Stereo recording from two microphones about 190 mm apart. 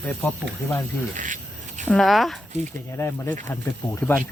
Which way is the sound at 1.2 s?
40° right (ahead or behind).